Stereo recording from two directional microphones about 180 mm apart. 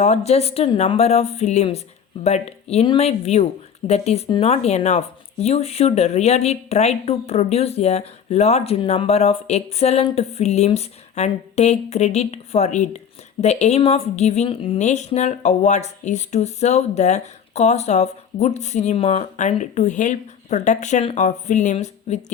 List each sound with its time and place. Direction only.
0.0 s a woman's voice: 40° left (ahead or behind)